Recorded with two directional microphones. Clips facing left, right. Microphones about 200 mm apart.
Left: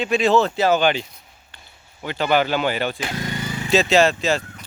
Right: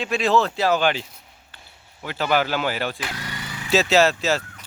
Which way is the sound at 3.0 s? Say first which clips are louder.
Left 6 dB; 25° left (ahead or behind).